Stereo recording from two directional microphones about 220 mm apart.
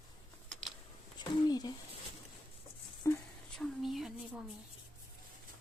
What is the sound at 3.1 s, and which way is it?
Speech, 10° left (ahead or behind).